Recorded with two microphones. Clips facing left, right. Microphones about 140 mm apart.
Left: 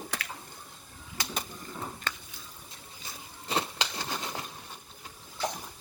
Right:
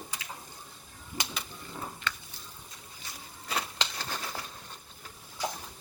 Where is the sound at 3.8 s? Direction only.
15° left (ahead or behind).